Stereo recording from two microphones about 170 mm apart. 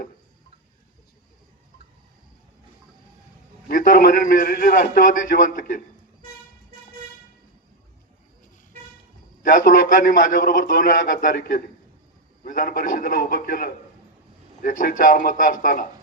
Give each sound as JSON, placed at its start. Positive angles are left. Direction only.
{"t": 3.7, "sound": "a man's voice", "side_deg": 55}
{"t": 9.4, "sound": "a man's voice", "side_deg": 55}